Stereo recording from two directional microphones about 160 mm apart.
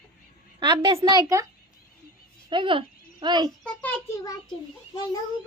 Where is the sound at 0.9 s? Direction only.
25° right (ahead or behind).